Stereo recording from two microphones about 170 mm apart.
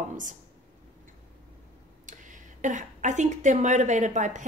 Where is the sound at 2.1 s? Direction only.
50° right (ahead or behind).